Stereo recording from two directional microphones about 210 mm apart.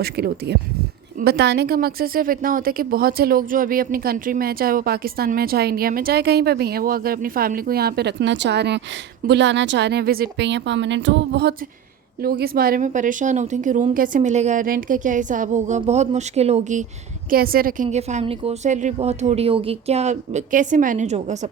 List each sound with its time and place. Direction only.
0.0 s a woman's voice: 50° right (ahead or behind); by 16.8 s 35° right (ahead or behind)
17.2 s a woman's voice: 45° right (ahead or behind)
17.8 s speech: 30° right (ahead or behind)